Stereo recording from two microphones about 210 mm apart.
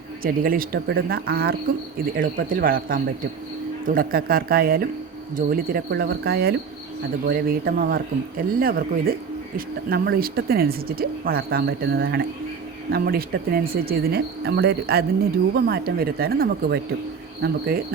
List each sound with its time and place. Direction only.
0.2 s speech: 45° right (ahead or behind)